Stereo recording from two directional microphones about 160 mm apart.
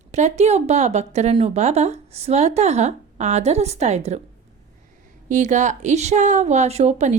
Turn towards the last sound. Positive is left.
turn(degrees=-45)  # may be behind; listen again after turning